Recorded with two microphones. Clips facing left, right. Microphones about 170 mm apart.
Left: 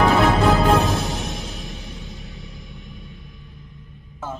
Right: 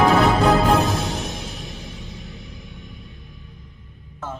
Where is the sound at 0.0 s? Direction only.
Centre (ahead or behind).